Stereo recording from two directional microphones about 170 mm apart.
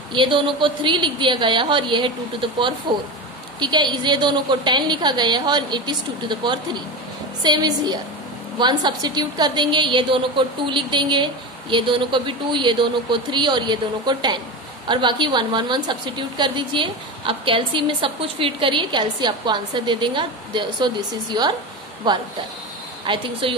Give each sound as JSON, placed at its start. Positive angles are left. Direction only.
{"t": 0.1, "sound": "a woman's voice", "side_deg": -30}